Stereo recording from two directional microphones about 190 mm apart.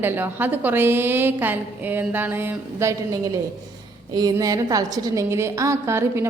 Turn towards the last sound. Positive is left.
turn(degrees=-15)  # may be behind; listen again after turning